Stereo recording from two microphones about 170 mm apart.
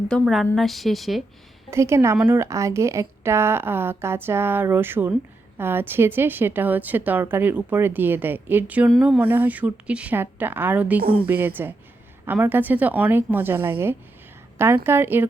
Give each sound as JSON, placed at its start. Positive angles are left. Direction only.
{"t": 0.1, "sound": "a woman's voice", "side_deg": 0}
{"t": 1.7, "sound": "a woman's voice", "side_deg": -15}